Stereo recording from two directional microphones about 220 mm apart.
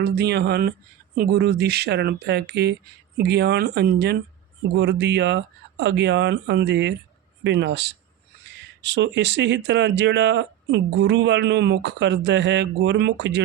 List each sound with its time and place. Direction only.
0.0 s speech: 50° right (ahead or behind)